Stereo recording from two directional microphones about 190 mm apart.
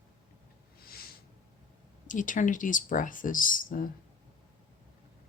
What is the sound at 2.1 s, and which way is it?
Speech, 40° left (ahead or behind).